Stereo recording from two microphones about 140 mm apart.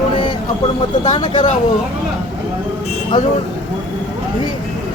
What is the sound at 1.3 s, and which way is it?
Speech, 60° left (ahead or behind).